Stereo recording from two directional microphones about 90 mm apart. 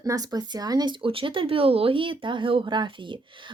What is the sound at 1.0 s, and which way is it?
Speech, 85° right.